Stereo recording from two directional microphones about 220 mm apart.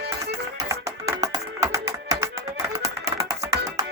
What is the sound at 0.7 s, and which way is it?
Music, 15° right (ahead or behind).